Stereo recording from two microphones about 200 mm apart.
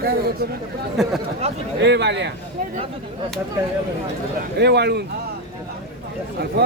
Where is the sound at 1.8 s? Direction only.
60° right (ahead or behind).